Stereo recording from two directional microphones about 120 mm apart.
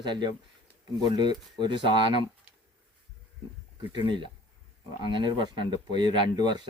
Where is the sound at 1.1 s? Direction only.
40° right (ahead or behind).